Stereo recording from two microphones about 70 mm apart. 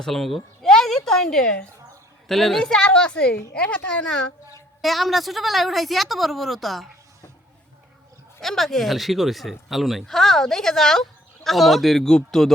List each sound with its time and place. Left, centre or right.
0.0 s a sound: centre
2.2 s a woman's voice: centre
4.8 s speech: centre
8.4 s speech: centre